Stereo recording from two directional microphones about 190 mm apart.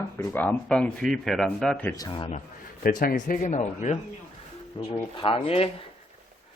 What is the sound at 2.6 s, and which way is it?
Speech, 45° left (ahead or behind).